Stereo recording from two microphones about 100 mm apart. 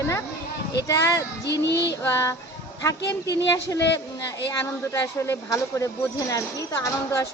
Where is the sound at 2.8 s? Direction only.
35° left (ahead or behind).